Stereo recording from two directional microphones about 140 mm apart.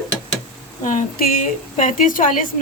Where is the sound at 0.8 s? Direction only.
75° left (ahead or behind).